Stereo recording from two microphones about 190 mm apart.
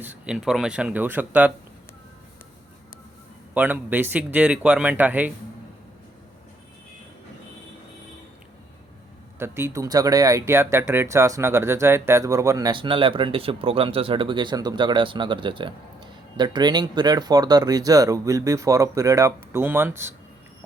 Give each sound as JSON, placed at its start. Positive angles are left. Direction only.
{"t": 0.0, "sound": "speech", "side_deg": -5}
{"t": 3.5, "sound": "speech", "side_deg": -10}
{"t": 9.4, "sound": "speech", "side_deg": -15}